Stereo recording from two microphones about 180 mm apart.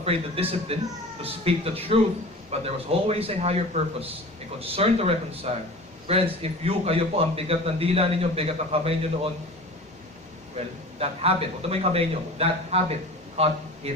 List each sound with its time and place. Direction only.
0.0 s a man's voice: 30° right (ahead or behind)
4.6 s a man's voice: 35° right (ahead or behind)
11.0 s a man's voice: 35° right (ahead or behind)